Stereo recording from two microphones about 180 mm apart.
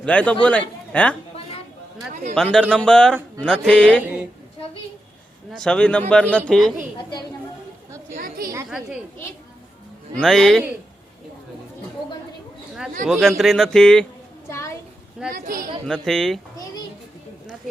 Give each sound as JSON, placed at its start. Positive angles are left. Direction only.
{"t": 0.0, "sound": "a man's voice", "side_deg": 5}
{"t": 2.3, "sound": "speech", "side_deg": 5}
{"t": 5.5, "sound": "a man's voice", "side_deg": 5}
{"t": 8.1, "sound": "speech", "side_deg": -50}
{"t": 10.2, "sound": "speech", "side_deg": 0}
{"t": 13.1, "sound": "speech", "side_deg": 0}
{"t": 14.5, "sound": "a sound", "side_deg": 15}
{"t": 15.3, "sound": "speech", "side_deg": -45}
{"t": 15.9, "sound": "speech", "side_deg": 0}